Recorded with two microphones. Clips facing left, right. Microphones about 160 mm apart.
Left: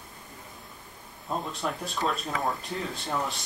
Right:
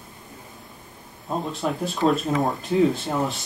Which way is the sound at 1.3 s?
Centre (ahead or behind).